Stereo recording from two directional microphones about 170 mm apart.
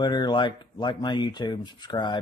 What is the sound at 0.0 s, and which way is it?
Speech, 25° left (ahead or behind).